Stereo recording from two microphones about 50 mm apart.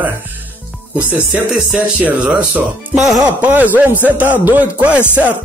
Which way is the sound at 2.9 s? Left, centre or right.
Centre.